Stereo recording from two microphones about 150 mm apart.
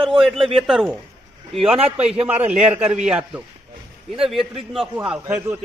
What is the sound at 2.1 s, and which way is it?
A man's voice, 10° right (ahead or behind).